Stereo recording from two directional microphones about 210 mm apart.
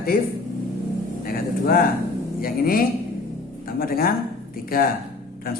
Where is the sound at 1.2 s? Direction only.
45° left (ahead or behind).